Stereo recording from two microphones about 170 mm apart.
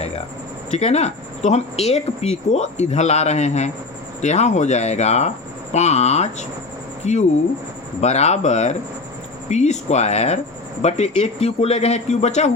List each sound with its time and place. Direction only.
0.7 s speech: 40° left (ahead or behind)